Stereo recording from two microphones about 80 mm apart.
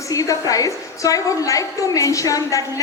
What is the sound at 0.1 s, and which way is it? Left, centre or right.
A woman's voice, left.